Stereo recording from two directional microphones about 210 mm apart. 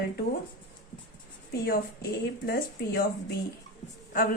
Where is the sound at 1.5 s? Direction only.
50° left (ahead or behind).